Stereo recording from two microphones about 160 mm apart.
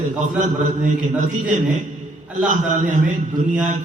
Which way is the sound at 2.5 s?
50° right (ahead or behind).